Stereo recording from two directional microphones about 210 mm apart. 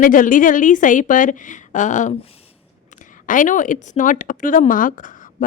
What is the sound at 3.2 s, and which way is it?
Speech, 40° left (ahead or behind).